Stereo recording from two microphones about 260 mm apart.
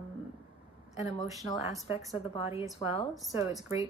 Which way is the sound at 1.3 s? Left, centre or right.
Centre.